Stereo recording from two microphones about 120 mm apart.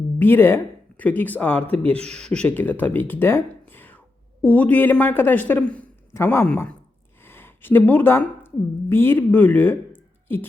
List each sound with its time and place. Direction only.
0.2 s a woman's voice: 20° left (ahead or behind)